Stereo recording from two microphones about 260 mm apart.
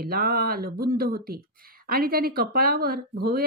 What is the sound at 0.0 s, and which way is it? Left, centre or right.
Speech, right.